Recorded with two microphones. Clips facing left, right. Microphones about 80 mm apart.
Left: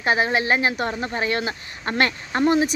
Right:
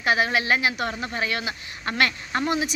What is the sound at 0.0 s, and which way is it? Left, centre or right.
Speech, left.